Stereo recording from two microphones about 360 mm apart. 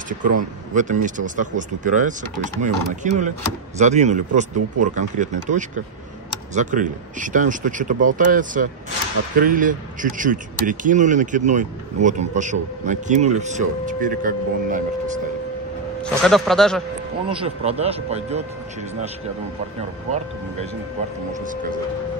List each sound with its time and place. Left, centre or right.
0.2 s speech: right
16.0 s a man's voice: centre
17.3 s speech: centre
21.3 s speech: right